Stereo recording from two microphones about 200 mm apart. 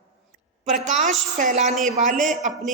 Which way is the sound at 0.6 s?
35° right (ahead or behind).